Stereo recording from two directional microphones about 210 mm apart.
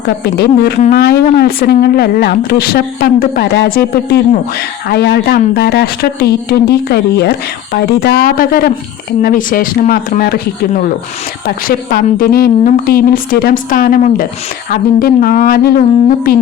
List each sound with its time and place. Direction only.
0.3 s a woman's voice: 50° left (ahead or behind)
11.4 s a woman's voice: 45° left (ahead or behind)